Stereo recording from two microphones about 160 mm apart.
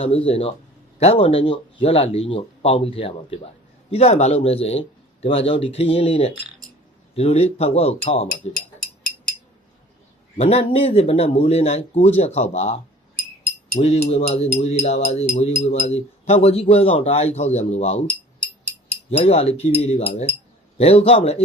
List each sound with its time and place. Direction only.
0.0 s speech: 35° left (ahead or behind)
10.3 s speech: 40° left (ahead or behind)
19.1 s speech: 35° left (ahead or behind)